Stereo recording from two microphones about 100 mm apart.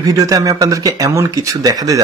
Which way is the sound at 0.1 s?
35° right (ahead or behind).